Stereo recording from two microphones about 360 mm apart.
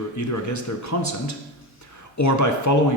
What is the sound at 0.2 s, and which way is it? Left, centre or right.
Speech, left.